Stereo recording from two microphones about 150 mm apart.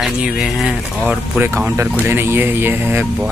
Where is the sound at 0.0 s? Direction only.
Centre (ahead or behind).